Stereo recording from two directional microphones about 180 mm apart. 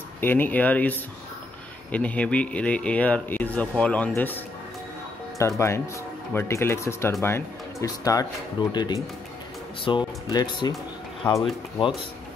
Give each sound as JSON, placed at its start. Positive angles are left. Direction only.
{"t": 0.2, "sound": "speech", "side_deg": 10}
{"t": 5.4, "sound": "speech", "side_deg": 15}
{"t": 11.2, "sound": "speech", "side_deg": 10}